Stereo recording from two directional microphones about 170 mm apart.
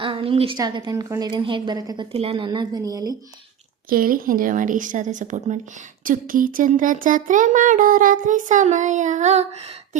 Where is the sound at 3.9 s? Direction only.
55° right (ahead or behind).